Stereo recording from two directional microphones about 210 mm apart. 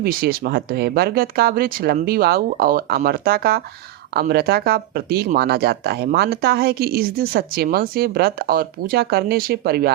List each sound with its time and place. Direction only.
0.0 s speech: 45° right (ahead or behind)